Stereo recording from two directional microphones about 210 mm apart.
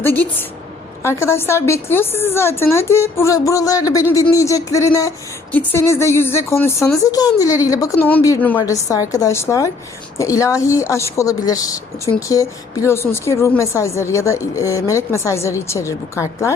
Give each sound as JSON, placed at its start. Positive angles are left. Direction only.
{"t": 0.0, "sound": "speech", "side_deg": 10}